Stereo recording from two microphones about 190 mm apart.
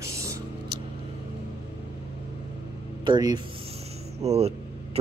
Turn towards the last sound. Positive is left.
turn(degrees=-35)  # may be behind; listen again after turning